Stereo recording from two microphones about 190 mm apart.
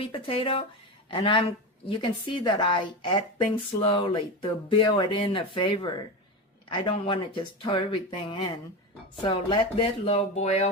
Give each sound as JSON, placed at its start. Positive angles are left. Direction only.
{"t": 0.0, "sound": "a woman's voice", "side_deg": 30}